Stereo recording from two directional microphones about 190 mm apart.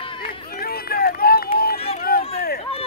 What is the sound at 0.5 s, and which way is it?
Run, 50° left (ahead or behind).